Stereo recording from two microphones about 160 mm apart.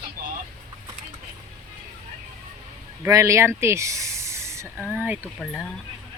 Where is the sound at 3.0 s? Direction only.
20° right (ahead or behind).